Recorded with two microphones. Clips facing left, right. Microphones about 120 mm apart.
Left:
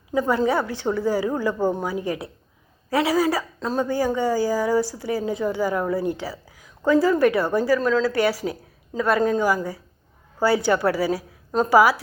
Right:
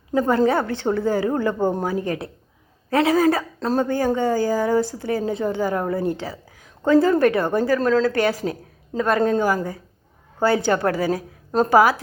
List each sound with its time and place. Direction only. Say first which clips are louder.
0.1 s a woman's voice: right 3 dB; 50° right (ahead or behind)